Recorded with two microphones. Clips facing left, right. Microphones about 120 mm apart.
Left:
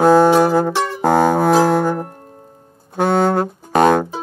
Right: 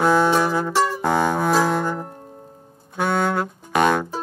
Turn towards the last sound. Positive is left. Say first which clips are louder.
# left 6 dB
turn(degrees=40)  # may be behind; listen again after turning